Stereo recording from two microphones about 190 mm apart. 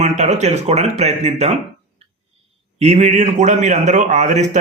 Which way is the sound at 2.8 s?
35° right (ahead or behind).